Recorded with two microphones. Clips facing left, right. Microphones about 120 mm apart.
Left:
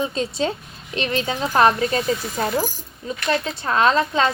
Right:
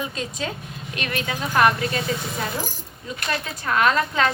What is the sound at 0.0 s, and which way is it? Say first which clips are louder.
A woman's voice: left 6 dB; 30° left (ahead or behind).